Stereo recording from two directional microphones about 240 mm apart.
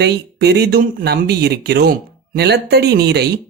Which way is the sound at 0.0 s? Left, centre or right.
Right.